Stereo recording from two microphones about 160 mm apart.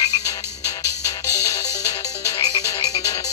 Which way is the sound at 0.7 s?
20° left (ahead or behind).